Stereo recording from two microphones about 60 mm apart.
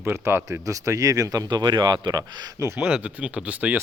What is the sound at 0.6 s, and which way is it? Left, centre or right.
Speech, right.